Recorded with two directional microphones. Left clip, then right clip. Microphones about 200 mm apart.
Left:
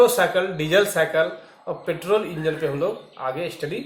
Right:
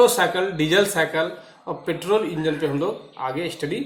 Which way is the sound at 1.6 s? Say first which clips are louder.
Even; 50° right (ahead or behind).